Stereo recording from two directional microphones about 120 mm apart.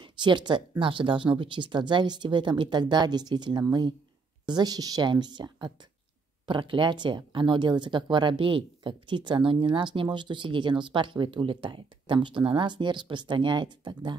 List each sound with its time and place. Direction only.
0.0 s speech: 40° right (ahead or behind)